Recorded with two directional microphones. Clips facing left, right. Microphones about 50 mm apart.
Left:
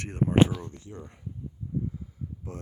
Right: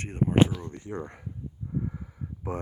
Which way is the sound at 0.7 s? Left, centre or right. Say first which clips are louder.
Right 7 dB; right.